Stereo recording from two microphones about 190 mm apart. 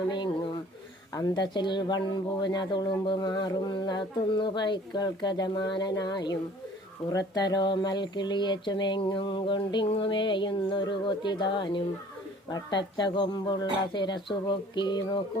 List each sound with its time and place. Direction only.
1.1 s speech: 20° left (ahead or behind)